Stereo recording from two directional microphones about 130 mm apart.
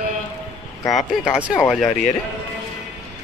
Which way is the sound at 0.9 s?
5° right (ahead or behind).